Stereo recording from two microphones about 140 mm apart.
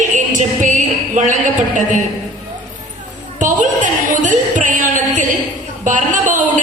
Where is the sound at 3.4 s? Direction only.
65° right (ahead or behind).